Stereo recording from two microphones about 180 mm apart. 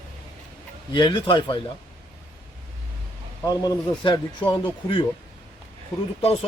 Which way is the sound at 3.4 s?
20° left (ahead or behind).